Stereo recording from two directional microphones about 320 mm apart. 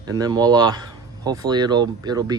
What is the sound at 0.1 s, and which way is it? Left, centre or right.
Speech, centre.